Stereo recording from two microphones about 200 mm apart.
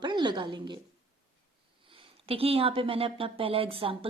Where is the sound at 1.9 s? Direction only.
30° right (ahead or behind).